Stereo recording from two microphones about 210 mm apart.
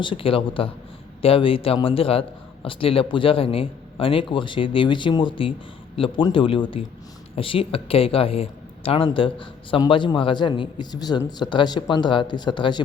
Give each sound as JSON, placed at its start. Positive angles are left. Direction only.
{"t": 0.0, "sound": "speech", "side_deg": 25}